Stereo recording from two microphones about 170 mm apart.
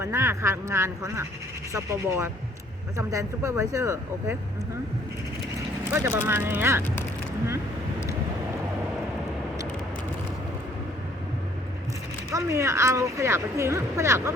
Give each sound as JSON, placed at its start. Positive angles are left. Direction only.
{"t": 0.0, "sound": "speech", "side_deg": -15}
{"t": 5.9, "sound": "speech", "side_deg": -15}
{"t": 12.3, "sound": "speech", "side_deg": -15}